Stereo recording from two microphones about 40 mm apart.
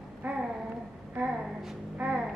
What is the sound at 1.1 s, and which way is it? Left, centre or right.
A woman's voice, right.